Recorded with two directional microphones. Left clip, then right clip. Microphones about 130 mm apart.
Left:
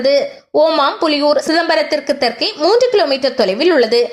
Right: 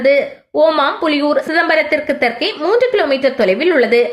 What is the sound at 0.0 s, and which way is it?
A woman's voice, 40° left (ahead or behind).